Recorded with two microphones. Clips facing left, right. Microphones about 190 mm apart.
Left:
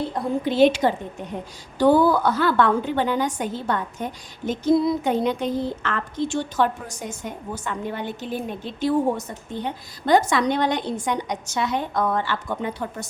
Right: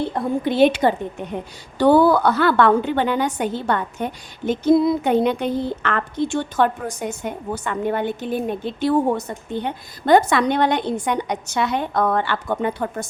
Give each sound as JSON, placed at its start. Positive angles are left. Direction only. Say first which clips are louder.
{"t": 0.1, "sound": "a woman's voice", "louder": "right 2 dB", "side_deg": -60}